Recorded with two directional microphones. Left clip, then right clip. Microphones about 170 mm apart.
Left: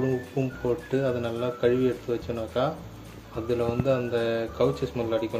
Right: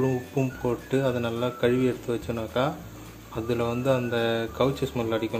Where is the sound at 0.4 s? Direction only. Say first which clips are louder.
Even; 25° right (ahead or behind).